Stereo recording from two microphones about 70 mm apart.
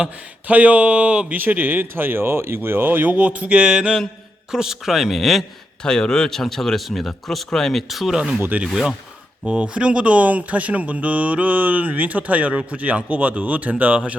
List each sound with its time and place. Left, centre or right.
0.0 s speech: right; by 5.5 s centre
5.8 s speech: centre
8.4 s speech: right
8.6 s speech: centre
9.5 s speech: centre